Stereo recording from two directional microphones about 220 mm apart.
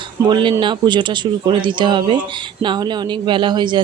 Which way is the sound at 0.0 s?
20° right (ahead or behind).